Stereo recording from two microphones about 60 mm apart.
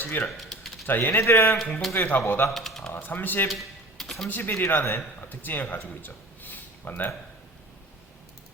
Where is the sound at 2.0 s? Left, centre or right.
Left.